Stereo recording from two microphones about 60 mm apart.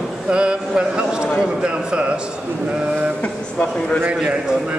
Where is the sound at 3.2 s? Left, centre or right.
Left.